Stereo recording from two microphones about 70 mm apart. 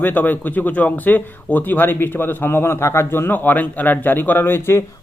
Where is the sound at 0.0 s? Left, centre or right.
Left.